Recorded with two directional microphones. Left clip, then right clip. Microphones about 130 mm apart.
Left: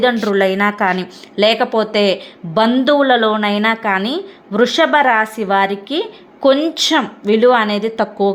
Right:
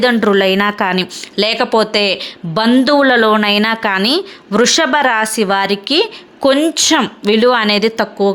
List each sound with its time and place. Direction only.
0.0 s speech: 20° right (ahead or behind)
6.9 s speech: 25° right (ahead or behind)
7.9 s a woman's voice: 5° right (ahead or behind)